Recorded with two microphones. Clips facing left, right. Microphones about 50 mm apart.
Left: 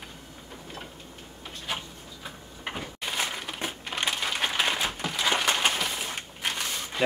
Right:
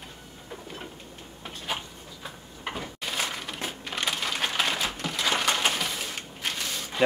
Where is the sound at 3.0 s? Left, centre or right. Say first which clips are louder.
Left 1 dB; centre.